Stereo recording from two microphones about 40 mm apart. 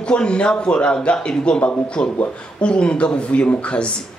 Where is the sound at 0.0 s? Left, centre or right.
Left.